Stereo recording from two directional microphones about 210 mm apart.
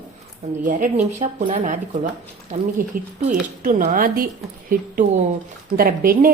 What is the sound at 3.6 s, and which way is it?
Speech, 40° right (ahead or behind).